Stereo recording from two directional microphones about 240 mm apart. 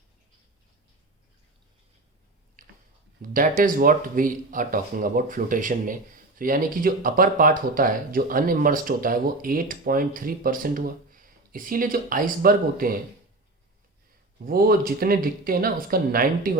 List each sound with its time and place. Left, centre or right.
2.6 s a sound: right
3.2 s speech: right
14.4 s speech: right